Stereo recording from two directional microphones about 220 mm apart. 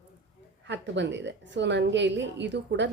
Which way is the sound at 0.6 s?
55° right (ahead or behind).